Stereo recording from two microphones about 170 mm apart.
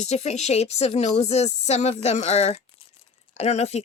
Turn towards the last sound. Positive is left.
turn(degrees=40)  # may be behind; listen again after turning